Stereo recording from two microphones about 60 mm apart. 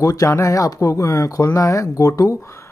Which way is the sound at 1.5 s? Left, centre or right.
Left.